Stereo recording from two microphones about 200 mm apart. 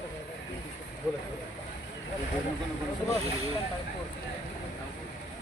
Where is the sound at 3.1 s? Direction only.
30° right (ahead or behind).